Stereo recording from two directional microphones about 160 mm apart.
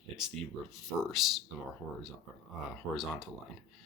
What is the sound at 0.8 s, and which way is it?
Speech, centre (ahead or behind).